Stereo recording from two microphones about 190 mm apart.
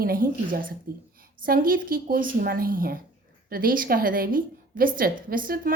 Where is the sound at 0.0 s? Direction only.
50° right (ahead or behind).